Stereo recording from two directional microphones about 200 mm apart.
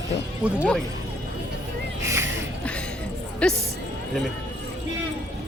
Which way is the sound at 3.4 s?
5° left (ahead or behind).